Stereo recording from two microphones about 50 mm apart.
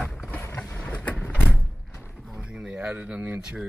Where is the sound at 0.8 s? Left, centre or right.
Left.